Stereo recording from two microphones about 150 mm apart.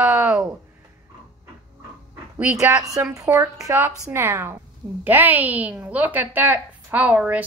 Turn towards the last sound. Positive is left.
turn(degrees=-10)  # may be behind; listen again after turning